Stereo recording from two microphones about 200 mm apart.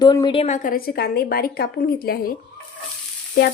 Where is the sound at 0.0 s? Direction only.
20° left (ahead or behind); by 2.2 s 50° left (ahead or behind).